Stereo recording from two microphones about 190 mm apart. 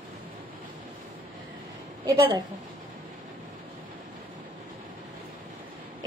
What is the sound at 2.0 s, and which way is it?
Speech, 25° right (ahead or behind).